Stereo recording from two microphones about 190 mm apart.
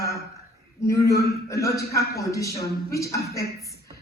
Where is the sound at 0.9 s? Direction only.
15° left (ahead or behind).